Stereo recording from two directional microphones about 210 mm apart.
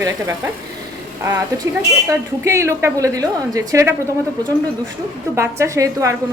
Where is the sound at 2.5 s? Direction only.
15° right (ahead or behind).